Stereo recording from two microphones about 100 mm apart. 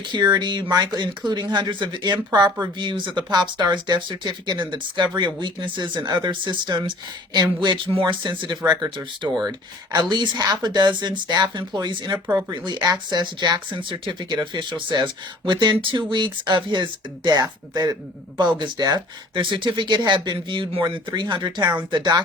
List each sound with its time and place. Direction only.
0.0 s speech: 45° right (ahead or behind)
19.4 s speech: 55° right (ahead or behind)